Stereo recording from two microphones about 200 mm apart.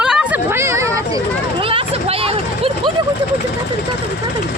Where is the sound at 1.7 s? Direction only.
30° right (ahead or behind).